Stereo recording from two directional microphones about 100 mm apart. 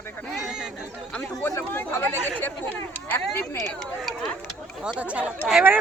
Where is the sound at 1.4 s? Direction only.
20° left (ahead or behind).